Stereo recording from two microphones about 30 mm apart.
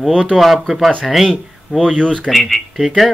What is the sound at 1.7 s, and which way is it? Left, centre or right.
Speech, left.